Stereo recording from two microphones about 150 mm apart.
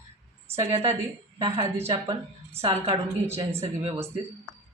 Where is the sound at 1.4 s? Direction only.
40° right (ahead or behind).